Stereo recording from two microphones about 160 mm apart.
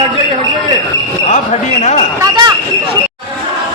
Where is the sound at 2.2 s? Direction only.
25° right (ahead or behind).